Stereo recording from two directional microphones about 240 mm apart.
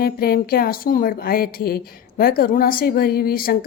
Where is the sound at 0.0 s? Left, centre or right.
Left.